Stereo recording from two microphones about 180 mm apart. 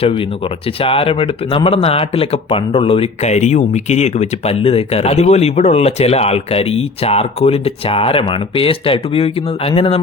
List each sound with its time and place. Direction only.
0.0 s speech: 30° left (ahead or behind)